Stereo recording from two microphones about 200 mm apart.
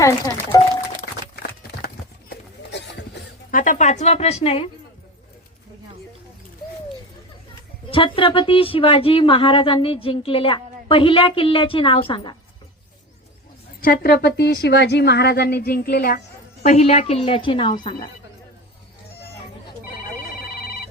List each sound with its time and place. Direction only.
0.0 s speech: 15° left (ahead or behind)
2.3 s a sound: 60° left (ahead or behind)
3.5 s speech: 40° left (ahead or behind)
7.9 s a woman's voice: 25° left (ahead or behind)
13.8 s speech: 50° left (ahead or behind)
16.6 s a woman's voice: 35° left (ahead or behind)